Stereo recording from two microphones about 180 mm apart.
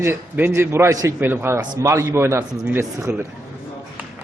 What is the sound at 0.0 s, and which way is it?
A man's voice, 15° right (ahead or behind).